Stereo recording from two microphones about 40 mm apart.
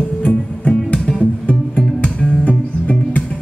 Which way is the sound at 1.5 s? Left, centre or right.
Left.